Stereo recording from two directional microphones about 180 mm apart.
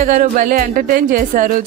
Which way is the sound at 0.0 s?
45° right (ahead or behind).